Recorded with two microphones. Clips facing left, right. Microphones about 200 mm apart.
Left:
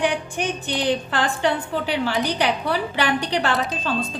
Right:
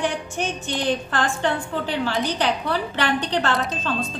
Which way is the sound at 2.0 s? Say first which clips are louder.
Even; 10° left (ahead or behind).